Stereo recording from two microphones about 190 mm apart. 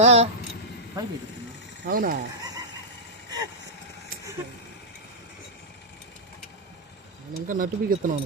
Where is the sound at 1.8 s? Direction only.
50° right (ahead or behind).